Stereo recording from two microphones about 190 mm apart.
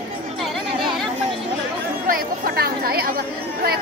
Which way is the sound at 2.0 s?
50° right (ahead or behind).